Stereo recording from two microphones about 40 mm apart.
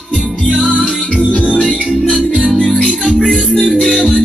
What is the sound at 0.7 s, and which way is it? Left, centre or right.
Music, centre.